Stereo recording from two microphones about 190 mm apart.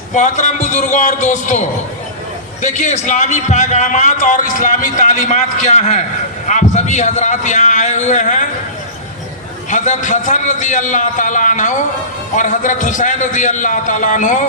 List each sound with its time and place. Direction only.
0.1 s a man's voice: 40° left (ahead or behind)
9.6 s a man's voice: 40° left (ahead or behind)